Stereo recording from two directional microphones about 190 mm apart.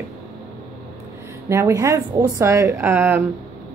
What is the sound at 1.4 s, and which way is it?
A woman's voice, 15° right (ahead or behind).